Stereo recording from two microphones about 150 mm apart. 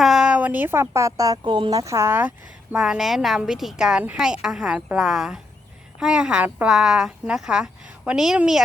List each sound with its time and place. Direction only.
0.0 s speech: 5° right (ahead or behind)
2.7 s speech: 5° right (ahead or behind)